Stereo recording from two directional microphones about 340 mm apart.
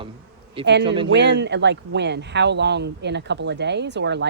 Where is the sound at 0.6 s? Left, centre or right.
Right.